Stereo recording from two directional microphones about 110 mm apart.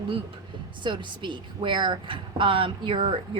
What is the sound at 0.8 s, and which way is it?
A woman's voice, 45° right (ahead or behind).